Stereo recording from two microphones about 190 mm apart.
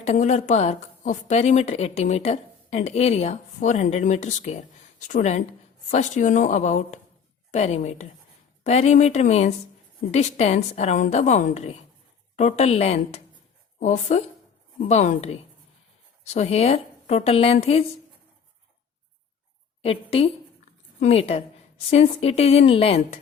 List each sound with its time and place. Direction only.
0.0 s a woman's voice: 35° left (ahead or behind)
19.8 s a woman's voice: 30° left (ahead or behind)